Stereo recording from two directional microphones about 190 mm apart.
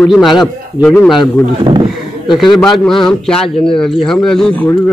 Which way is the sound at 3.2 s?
5° left (ahead or behind).